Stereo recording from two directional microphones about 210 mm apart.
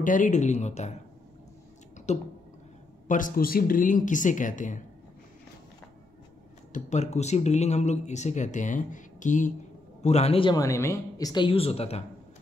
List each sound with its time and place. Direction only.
0.0 s speech: 40° left (ahead or behind)
2.1 s speech: 30° left (ahead or behind)
6.7 s speech: 35° left (ahead or behind)